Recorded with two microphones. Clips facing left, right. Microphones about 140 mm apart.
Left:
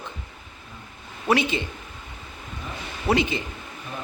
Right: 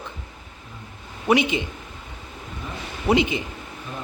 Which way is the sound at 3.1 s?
15° right (ahead or behind).